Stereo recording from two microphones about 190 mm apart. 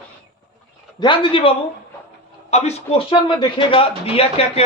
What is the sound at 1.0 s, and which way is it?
A man's voice, 25° left (ahead or behind).